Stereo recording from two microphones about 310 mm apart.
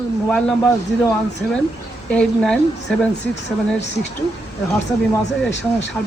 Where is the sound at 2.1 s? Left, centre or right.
Centre.